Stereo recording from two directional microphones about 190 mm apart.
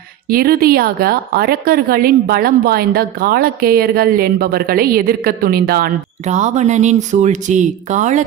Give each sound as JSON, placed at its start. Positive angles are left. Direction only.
{"t": 0.3, "sound": "a woman's voice", "side_deg": -50}
{"t": 6.2, "sound": "speech", "side_deg": -40}